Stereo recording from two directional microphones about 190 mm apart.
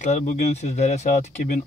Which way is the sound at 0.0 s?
40° left (ahead or behind).